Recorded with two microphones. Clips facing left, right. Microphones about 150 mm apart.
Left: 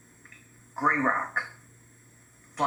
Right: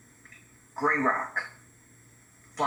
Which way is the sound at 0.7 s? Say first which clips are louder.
Even; 40° right (ahead or behind).